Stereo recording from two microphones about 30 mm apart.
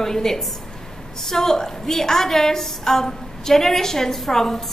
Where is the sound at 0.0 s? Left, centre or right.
Centre.